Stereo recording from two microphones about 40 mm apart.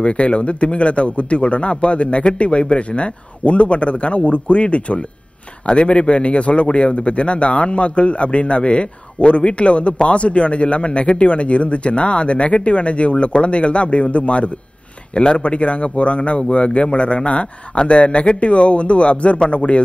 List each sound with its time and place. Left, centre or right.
0.0 s a man's voice: left